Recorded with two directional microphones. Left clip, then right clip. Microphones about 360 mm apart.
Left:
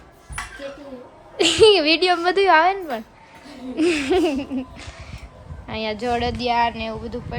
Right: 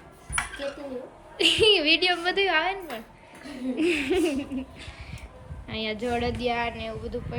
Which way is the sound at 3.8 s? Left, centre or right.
Centre.